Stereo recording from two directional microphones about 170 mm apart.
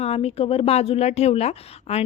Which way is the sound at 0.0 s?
35° left (ahead or behind).